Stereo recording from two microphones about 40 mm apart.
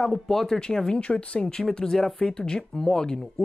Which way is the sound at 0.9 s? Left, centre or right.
Left.